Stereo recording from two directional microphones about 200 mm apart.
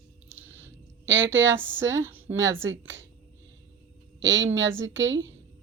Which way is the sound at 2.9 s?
70° right (ahead or behind).